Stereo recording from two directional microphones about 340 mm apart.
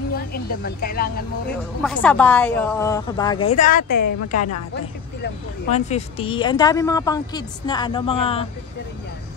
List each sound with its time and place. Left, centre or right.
0.3 s speech: left
1.8 s a woman's voice: centre; by 4.0 s left
4.3 s speech: left
5.2 s speech: centre